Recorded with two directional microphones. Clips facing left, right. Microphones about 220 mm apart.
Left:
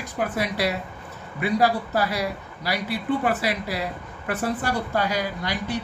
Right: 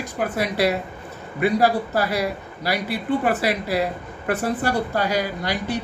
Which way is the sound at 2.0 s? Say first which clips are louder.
Right 2 dB; 45° right (ahead or behind).